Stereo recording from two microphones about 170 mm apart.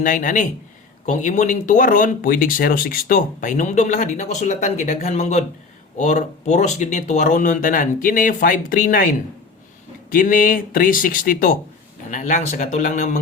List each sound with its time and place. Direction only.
0.0 s speech: 50° left (ahead or behind)
10.1 s speech: 55° left (ahead or behind)
12.1 s speech: 45° left (ahead or behind)